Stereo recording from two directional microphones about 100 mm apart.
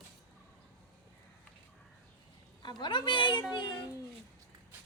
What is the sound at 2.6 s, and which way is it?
Speech, 50° left (ahead or behind).